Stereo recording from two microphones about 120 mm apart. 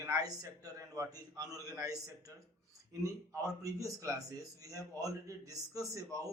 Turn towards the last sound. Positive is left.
turn(degrees=-30)  # may be behind; listen again after turning